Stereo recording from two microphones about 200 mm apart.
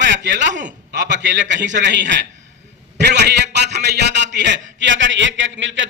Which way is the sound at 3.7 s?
60° right (ahead or behind).